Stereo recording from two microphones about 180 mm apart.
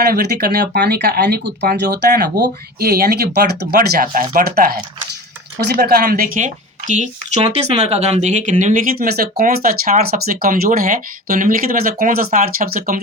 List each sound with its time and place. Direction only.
0.0 s speech: 55° right (ahead or behind)